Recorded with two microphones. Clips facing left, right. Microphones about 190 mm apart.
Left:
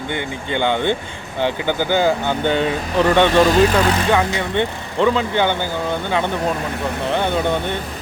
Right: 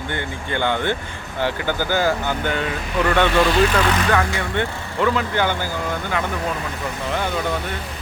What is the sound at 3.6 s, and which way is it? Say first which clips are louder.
Speech: left 3 dB; 20° left (ahead or behind).